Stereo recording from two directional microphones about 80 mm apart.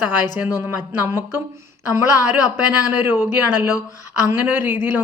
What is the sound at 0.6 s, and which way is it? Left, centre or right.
A woman's voice, right.